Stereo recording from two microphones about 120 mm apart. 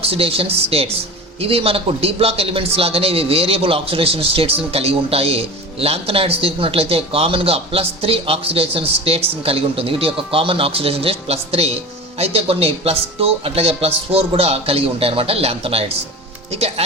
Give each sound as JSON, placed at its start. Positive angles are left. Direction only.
{"t": 0.0, "sound": "speech", "side_deg": -55}